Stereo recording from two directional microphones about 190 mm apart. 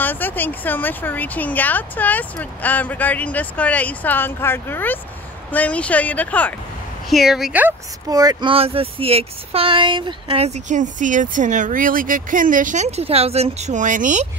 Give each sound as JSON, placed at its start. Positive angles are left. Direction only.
{"t": 0.0, "sound": "speech", "side_deg": 10}